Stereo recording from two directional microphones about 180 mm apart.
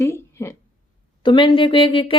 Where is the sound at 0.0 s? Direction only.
15° left (ahead or behind).